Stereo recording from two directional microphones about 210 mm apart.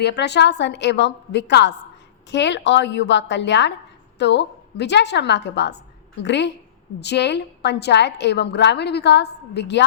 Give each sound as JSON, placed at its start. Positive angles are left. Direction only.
{"t": 0.0, "sound": "a woman's voice", "side_deg": 50}